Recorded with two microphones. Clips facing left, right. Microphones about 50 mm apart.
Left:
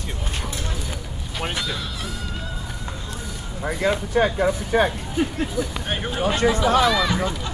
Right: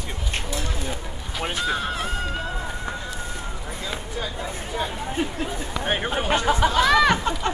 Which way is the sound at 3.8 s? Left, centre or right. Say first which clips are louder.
Left 12 dB; left.